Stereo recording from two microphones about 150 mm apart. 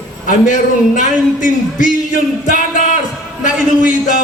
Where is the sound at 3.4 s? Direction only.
60° left (ahead or behind).